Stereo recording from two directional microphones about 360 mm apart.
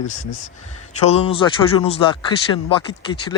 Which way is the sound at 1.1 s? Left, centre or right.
Centre.